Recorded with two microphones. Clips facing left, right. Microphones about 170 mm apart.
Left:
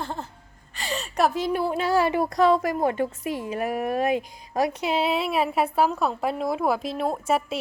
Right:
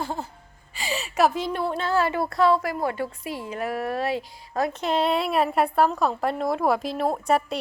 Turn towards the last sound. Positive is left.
turn(degrees=5)  # may be behind; listen again after turning